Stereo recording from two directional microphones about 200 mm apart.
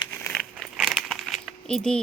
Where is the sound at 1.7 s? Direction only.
5° left (ahead or behind).